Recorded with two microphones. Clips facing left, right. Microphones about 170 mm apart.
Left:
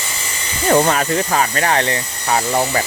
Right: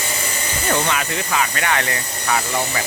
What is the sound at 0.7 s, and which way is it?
Speech, 40° left (ahead or behind).